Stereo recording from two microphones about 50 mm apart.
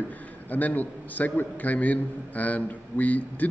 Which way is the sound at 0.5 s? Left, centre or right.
Left.